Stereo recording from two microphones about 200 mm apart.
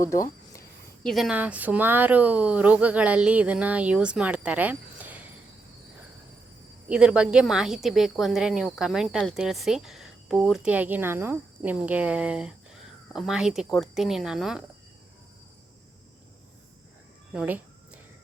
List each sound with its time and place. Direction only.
0.0 s a sound: 15° left (ahead or behind)
1.0 s speech: centre (ahead or behind)
6.8 s speech: 5° right (ahead or behind)
17.3 s speech: 10° right (ahead or behind)